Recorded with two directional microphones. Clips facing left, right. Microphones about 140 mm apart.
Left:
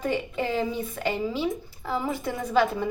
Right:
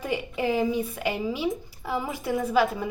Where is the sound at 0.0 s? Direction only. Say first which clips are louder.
Even; 10° right (ahead or behind).